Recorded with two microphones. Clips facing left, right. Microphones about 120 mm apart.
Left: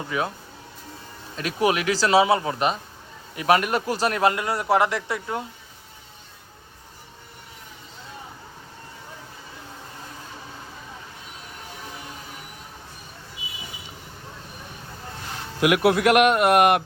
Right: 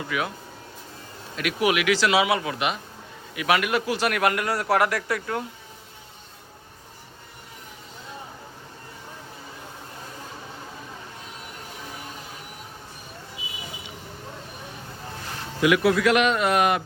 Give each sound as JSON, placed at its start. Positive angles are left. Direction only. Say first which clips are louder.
{"t": 0.1, "sound": "speech", "louder": "left 2 dB", "side_deg": 30}
{"t": 1.4, "sound": "speech", "louder": "left 1 dB", "side_deg": 35}
{"t": 15.6, "sound": "a man's voice", "louder": "left 1 dB", "side_deg": 60}